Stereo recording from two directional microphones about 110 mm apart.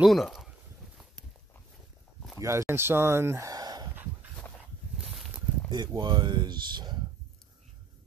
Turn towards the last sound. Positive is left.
turn(degrees=-40)  # may be behind; listen again after turning